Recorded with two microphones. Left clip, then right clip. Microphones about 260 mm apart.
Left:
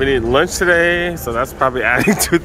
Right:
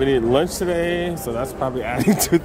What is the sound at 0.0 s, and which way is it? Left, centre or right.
Speech, centre.